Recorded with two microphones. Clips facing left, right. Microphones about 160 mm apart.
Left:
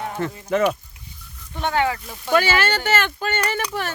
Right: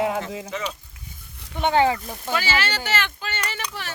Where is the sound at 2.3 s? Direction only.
55° left (ahead or behind).